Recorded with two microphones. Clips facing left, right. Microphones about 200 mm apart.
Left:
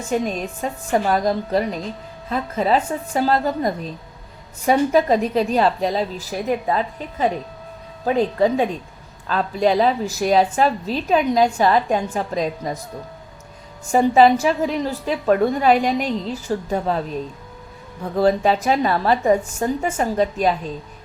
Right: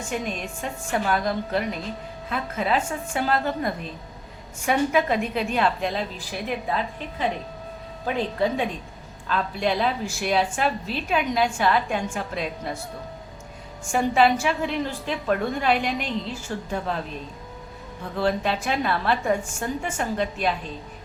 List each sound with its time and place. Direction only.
0.1 s a woman's voice: 40° left (ahead or behind)
13.8 s a woman's voice: 40° left (ahead or behind)